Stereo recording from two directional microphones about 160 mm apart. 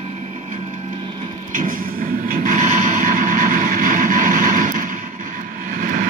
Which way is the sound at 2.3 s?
60° right (ahead or behind).